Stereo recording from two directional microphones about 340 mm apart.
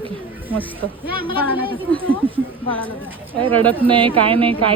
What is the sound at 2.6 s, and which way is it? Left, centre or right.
Speech, centre.